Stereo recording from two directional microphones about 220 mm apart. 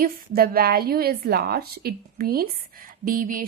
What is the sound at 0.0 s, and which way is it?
A woman's voice, 40° right (ahead or behind).